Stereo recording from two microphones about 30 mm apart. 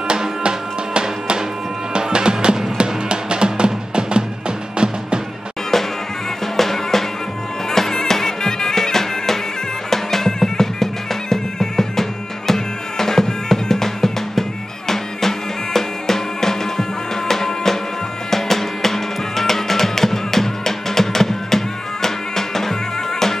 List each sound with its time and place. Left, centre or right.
0.4 s music: right
6.4 s music: centre